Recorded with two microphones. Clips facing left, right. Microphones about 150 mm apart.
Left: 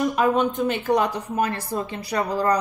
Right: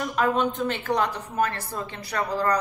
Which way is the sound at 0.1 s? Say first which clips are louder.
Left 3 dB; 15° left (ahead or behind).